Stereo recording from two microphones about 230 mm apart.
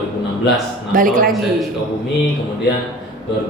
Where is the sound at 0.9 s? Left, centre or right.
Right.